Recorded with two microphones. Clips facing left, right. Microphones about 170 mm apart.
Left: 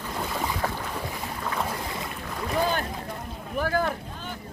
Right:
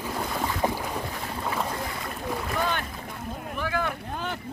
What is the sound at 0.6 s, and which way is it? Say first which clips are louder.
Boat: right 6 dB; 15° right (ahead or behind).